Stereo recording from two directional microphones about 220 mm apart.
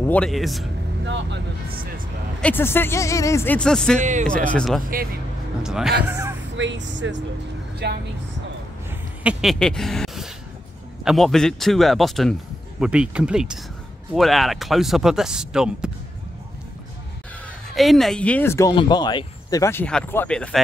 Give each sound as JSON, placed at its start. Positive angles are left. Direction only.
{"t": 0.1, "sound": "speech", "side_deg": 0}
{"t": 1.0, "sound": "speech", "side_deg": -55}
{"t": 2.4, "sound": "speech", "side_deg": 10}
{"t": 4.0, "sound": "speech", "side_deg": -35}
{"t": 4.3, "sound": "speech", "side_deg": 5}
{"t": 6.5, "sound": "speech", "side_deg": -55}
{"t": 9.2, "sound": "speech", "side_deg": -5}
{"t": 17.7, "sound": "speech", "side_deg": 0}